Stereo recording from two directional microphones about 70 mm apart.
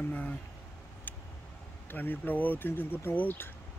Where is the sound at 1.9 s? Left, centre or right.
Left.